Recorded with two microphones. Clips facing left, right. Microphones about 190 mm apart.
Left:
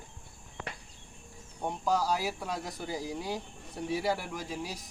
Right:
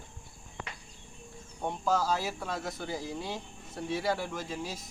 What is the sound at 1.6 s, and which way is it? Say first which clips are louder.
Speech: even; 10° left (ahead or behind).